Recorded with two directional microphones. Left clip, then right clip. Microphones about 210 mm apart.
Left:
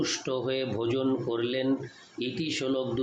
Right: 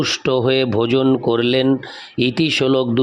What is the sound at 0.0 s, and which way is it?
A man's voice, 50° right (ahead or behind).